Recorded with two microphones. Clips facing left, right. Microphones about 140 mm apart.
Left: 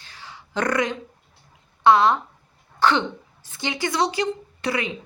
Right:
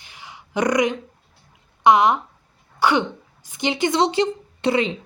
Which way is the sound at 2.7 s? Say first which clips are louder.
Right 1 dB; 10° right (ahead or behind).